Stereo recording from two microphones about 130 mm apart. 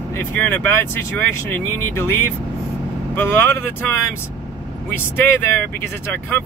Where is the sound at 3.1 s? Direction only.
15° left (ahead or behind).